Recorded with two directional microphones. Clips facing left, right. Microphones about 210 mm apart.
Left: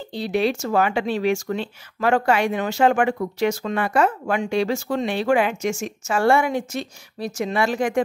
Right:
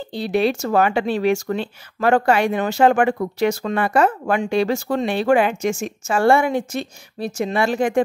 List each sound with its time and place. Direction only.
0.1 s speech: 35° right (ahead or behind)
0.6 s speech: 50° right (ahead or behind); by 8.0 s 30° right (ahead or behind)